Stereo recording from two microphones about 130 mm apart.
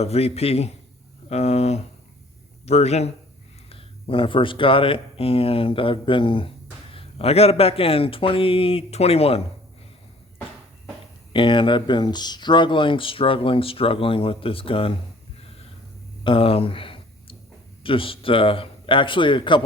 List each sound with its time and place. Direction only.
0.0 s speech: 50° left (ahead or behind)
3.7 s speech: 45° left (ahead or behind)
11.3 s speech: 40° left (ahead or behind)
16.2 s a sound: 45° left (ahead or behind)
17.8 s speech: 45° left (ahead or behind)